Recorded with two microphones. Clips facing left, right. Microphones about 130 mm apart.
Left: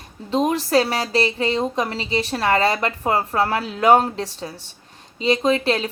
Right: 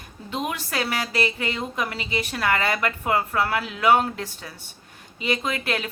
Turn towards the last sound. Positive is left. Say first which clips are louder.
# left 8 dB
turn(degrees=30)  # may be behind; listen again after turning